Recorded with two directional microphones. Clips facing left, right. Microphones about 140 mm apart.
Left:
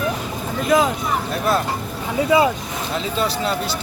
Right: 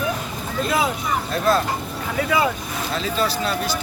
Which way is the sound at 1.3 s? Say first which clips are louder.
Right 2 dB; 10° left (ahead or behind).